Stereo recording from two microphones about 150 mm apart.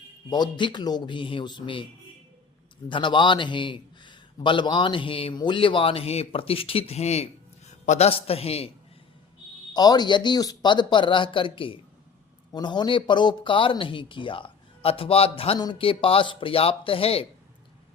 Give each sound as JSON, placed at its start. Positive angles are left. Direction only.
{"t": 0.3, "sound": "a man's voice", "side_deg": 30}
{"t": 2.9, "sound": "a man's voice", "side_deg": 30}
{"t": 9.7, "sound": "a man's voice", "side_deg": 25}
{"t": 15.5, "sound": "a man's voice", "side_deg": 30}